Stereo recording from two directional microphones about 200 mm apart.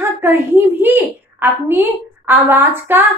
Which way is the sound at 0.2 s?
10° right (ahead or behind).